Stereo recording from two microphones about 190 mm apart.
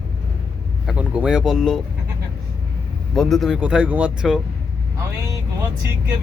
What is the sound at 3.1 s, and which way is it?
Speech, centre (ahead or behind).